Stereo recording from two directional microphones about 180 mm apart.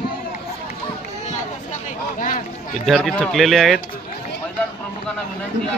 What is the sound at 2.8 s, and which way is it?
Speech, centre (ahead or behind).